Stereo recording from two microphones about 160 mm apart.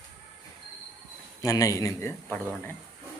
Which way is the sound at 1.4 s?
20° left (ahead or behind).